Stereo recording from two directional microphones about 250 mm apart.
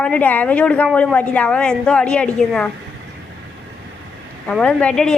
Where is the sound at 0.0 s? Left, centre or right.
Centre.